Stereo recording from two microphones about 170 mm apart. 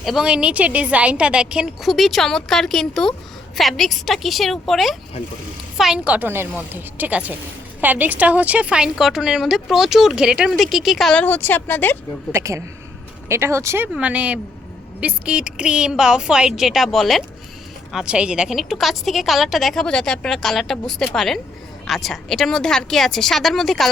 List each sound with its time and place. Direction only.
0.0 s a woman's voice: centre (ahead or behind)
12.3 s a woman's voice: 15° right (ahead or behind); by 23.9 s centre (ahead or behind)